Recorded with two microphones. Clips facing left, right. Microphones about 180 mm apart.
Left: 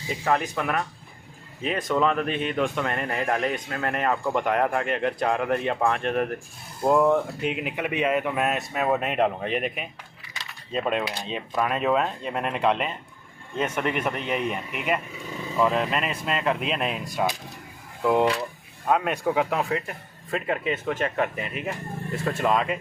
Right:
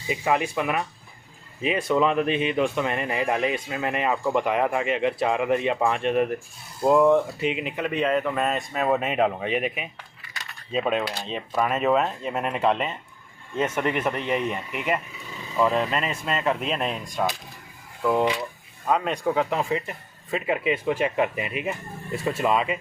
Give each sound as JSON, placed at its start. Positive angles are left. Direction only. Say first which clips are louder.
{"t": 0.1, "sound": "speech", "louder": "right 1 dB", "side_deg": -5}
{"t": 18.0, "sound": "speech", "louder": "left 1 dB", "side_deg": 15}
{"t": 18.9, "sound": "speech", "louder": "even", "side_deg": 5}